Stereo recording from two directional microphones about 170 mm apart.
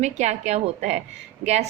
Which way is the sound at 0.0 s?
40° right (ahead or behind).